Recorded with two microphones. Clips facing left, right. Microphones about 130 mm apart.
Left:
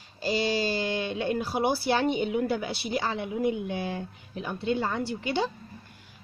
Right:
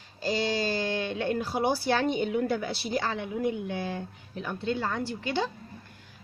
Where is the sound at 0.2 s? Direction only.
10° left (ahead or behind).